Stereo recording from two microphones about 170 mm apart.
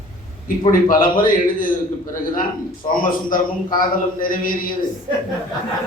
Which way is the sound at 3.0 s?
55° left (ahead or behind).